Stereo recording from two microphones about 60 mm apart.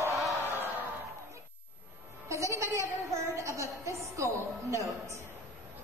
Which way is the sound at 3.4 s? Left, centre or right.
Right.